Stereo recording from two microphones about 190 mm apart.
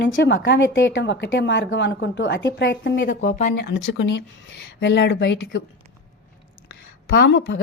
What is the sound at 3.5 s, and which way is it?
A woman's voice, 75° left (ahead or behind).